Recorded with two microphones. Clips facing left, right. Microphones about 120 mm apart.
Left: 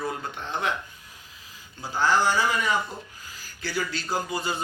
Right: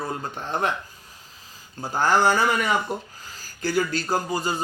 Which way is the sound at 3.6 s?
45° right (ahead or behind).